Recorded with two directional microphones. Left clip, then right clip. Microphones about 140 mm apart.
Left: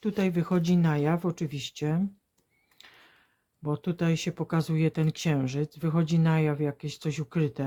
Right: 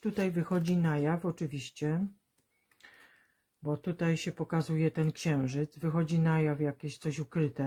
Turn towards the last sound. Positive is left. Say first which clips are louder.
# left 3 dB
turn(degrees=25)  # may be behind; listen again after turning